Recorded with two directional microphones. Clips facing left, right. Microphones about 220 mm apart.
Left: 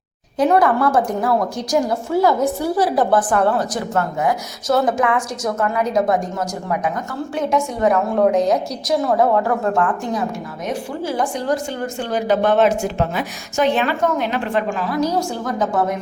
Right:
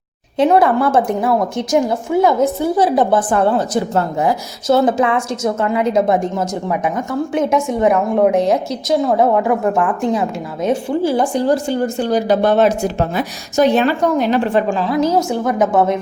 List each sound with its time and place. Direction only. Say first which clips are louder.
0.3 s a woman's voice: right 3 dB; 25° right (ahead or behind)
7.3 s a woman's voice: right 3 dB; 20° right (ahead or behind)
9.3 s speech: right 3 dB; 15° right (ahead or behind)
10.1 s a woman's voice: right 4 dB; 25° right (ahead or behind)